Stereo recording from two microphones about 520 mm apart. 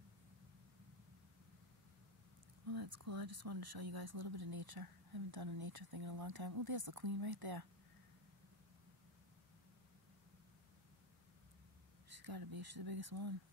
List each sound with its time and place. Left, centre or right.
2.7 s speech: right
12.1 s speech: right